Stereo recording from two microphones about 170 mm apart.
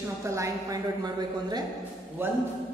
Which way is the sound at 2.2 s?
15° right (ahead or behind).